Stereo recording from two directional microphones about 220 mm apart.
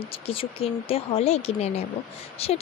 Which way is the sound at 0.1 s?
25° left (ahead or behind).